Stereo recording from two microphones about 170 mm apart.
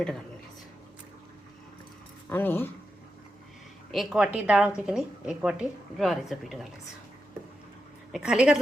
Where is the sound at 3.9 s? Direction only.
5° right (ahead or behind).